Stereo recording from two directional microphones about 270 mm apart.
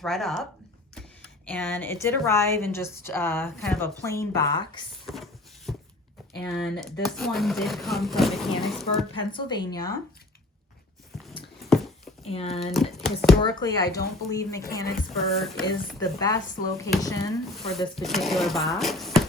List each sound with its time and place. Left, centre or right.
0.0 s speech: centre
1.5 s a woman's voice: centre
5.0 s a sound: centre
6.3 s speech: centre
9.3 s a woman's voice: centre
11.1 s a sound: centre
12.2 s speech: left
12.7 s speech: centre
13.4 s a woman's voice: centre
15.4 s speech: centre
16.0 s a woman's voice: centre
17.7 s speech: centre